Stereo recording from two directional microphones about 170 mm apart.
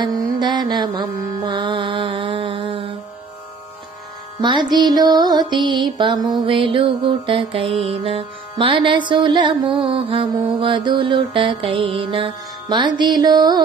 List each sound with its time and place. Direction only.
0.0 s mantra: 25° right (ahead or behind)
1.4 s music: 25° right (ahead or behind)
4.4 s music: 25° right (ahead or behind)